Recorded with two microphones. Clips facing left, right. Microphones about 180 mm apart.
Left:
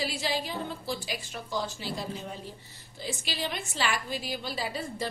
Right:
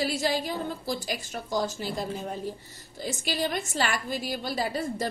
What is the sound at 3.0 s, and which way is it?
A woman's voice, 45° right (ahead or behind).